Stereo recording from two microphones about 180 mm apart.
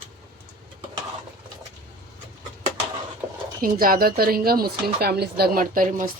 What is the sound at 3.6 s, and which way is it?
A woman's voice, 50° right (ahead or behind).